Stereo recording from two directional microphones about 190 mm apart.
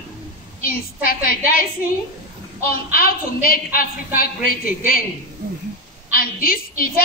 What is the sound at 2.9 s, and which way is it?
A woman's voice, 50° left (ahead or behind).